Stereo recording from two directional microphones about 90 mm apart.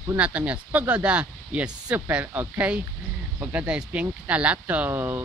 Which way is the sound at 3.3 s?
15° right (ahead or behind).